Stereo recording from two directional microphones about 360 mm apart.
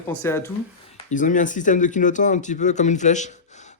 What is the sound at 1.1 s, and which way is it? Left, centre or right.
Speech, left.